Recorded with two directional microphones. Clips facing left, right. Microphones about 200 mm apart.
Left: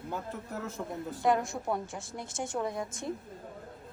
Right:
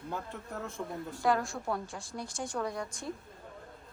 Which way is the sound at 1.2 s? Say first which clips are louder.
Left 2 dB; 20° left (ahead or behind).